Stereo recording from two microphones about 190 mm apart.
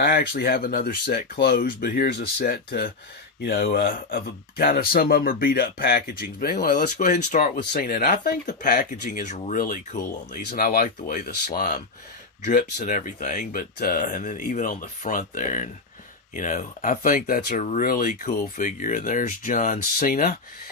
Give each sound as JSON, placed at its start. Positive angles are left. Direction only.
{"t": 0.0, "sound": "speech", "side_deg": 55}